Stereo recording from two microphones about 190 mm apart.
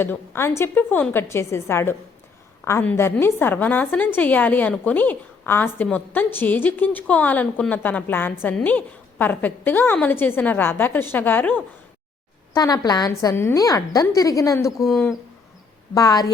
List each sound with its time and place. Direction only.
0.0 s a woman's voice: 10° left (ahead or behind)
12.5 s a woman's voice: 20° left (ahead or behind)
14.8 s speech: centre (ahead or behind)
16.0 s a woman's voice: 20° left (ahead or behind)